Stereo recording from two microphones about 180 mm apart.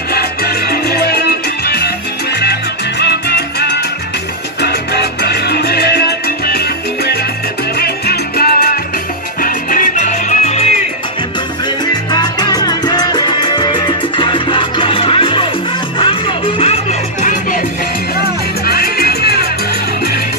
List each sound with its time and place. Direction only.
0.1 s music: 60° left (ahead or behind)
3.0 s music: 65° left (ahead or behind)
7.7 s salsa music: 60° left (ahead or behind)
9.4 s music: 50° left (ahead or behind)
11.8 s music: 25° left (ahead or behind)
18.1 s music: 60° left (ahead or behind)